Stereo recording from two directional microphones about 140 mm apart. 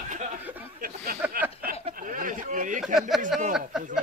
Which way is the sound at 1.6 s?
80° right.